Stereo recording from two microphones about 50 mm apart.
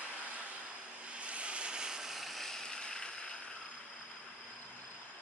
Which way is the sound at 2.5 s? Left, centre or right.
Centre.